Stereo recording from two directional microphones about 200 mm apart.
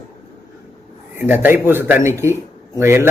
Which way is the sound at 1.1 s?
10° right (ahead or behind).